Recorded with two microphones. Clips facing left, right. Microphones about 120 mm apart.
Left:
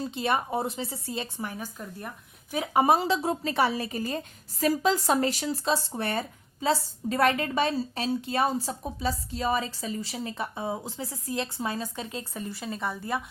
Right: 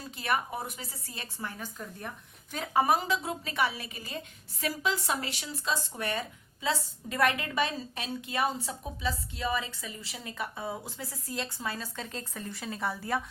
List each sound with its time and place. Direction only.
0.0 s a woman's voice: 25° left (ahead or behind)
2.8 s a woman's voice: 30° left (ahead or behind); by 13.2 s centre (ahead or behind)